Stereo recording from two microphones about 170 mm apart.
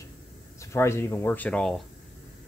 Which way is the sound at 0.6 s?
15° left (ahead or behind).